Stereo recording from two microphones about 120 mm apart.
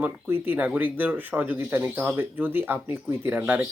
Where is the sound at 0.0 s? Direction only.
15° right (ahead or behind).